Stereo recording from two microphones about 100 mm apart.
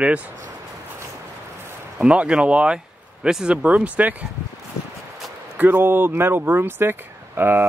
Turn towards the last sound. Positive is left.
turn(degrees=-20)  # may be behind; listen again after turning